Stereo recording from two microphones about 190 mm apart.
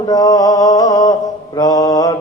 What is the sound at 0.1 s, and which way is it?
Music, 20° left (ahead or behind).